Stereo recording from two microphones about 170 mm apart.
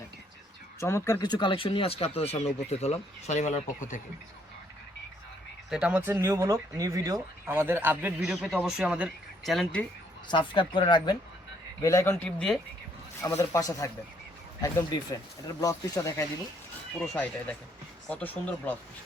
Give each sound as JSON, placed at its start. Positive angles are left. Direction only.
{"t": 0.8, "sound": "speech", "side_deg": 15}
{"t": 5.7, "sound": "speech", "side_deg": -5}
{"t": 10.2, "sound": "a man's voice", "side_deg": 30}